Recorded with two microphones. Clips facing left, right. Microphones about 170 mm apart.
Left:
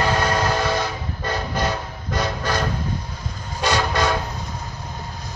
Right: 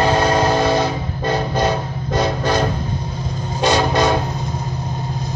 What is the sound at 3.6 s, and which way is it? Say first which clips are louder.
Vehicle: right 5 dB; 25° right (ahead or behind).